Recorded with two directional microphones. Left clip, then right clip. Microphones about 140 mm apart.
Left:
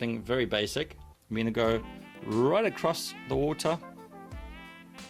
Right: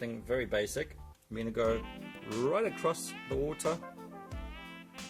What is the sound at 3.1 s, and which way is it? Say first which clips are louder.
Speech: left 4 dB; centre (ahead or behind).